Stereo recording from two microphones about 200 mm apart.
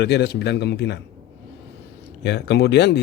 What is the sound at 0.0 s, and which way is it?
Speech, 55° left (ahead or behind).